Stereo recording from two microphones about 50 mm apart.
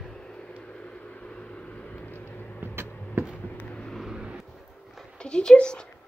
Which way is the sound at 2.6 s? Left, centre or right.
Right.